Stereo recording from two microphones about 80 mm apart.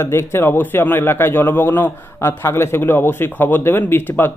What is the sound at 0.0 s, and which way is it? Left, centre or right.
A man's voice, left.